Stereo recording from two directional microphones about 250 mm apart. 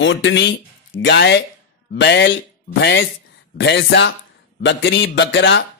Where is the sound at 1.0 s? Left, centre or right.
Left.